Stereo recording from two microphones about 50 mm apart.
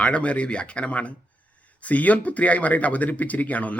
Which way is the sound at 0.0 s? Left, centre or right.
Left.